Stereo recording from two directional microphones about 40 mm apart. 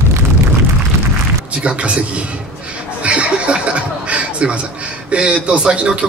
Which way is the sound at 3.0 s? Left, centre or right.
Right.